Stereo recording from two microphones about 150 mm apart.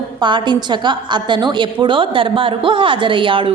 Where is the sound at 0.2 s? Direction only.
30° right (ahead or behind).